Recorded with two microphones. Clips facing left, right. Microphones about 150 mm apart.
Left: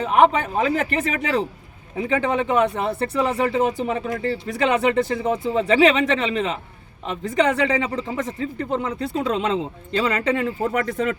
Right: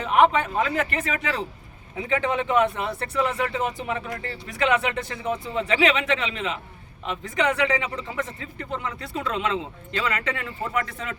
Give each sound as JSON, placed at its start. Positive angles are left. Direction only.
{"t": 0.0, "sound": "speech", "side_deg": 40}
{"t": 10.4, "sound": "a man's voice", "side_deg": 50}